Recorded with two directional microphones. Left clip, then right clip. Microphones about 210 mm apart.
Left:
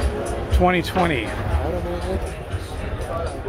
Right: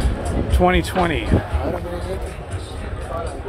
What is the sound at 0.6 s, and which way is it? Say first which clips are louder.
Speech: right 1 dB; 5° right (ahead or behind).